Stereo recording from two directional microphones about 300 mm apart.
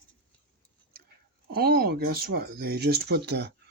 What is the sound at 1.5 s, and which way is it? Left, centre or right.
Speech, right.